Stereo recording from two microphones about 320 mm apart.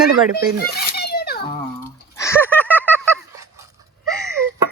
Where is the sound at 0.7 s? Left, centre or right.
Left.